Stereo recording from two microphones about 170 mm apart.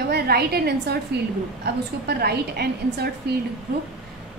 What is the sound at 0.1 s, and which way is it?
A woman's voice, 70° right (ahead or behind).